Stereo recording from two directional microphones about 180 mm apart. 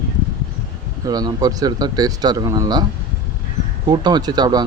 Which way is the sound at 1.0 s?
20° right (ahead or behind).